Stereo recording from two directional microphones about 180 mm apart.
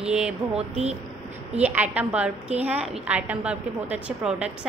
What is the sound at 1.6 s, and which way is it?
A woman's voice, 10° right (ahead or behind).